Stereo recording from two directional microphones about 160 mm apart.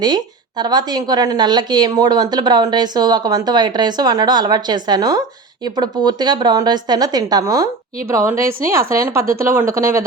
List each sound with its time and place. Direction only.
0.6 s a woman's voice: 25° right (ahead or behind)